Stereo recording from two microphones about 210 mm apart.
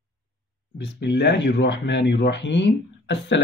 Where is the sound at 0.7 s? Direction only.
55° left (ahead or behind).